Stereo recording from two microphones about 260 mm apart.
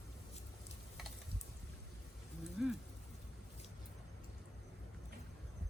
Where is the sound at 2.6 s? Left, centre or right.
Centre.